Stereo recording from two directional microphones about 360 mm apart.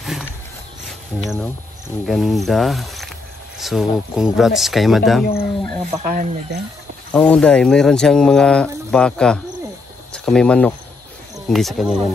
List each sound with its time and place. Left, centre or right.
0.0 s a sound: centre
1.2 s speech: centre
5.2 s speech: left
6.0 s speech: right
7.2 s speech: centre